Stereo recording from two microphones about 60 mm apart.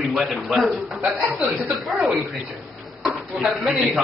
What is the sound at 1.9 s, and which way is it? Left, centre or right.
Speech, right.